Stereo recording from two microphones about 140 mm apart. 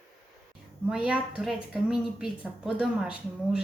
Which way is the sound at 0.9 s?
5° right (ahead or behind).